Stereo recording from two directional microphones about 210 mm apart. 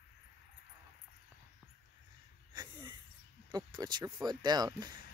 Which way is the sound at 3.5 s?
20° right (ahead or behind).